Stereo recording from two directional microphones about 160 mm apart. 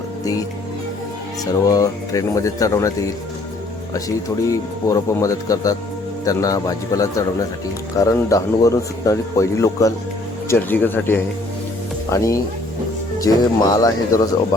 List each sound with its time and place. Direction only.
1.5 s a man's voice: 20° left (ahead or behind)
4.4 s a man's voice: 20° left (ahead or behind)